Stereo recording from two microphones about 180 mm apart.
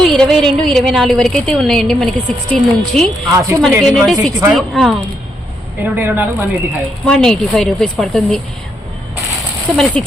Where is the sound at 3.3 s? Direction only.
15° right (ahead or behind).